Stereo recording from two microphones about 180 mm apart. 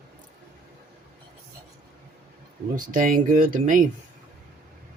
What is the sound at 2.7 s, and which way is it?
Speech, 50° right (ahead or behind).